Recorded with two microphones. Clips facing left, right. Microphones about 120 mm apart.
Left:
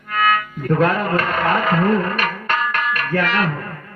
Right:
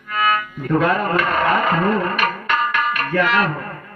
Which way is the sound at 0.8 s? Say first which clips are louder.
Even; 45° left (ahead or behind).